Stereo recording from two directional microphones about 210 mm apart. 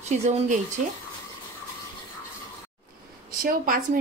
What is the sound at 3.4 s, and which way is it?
Speech, 45° right (ahead or behind).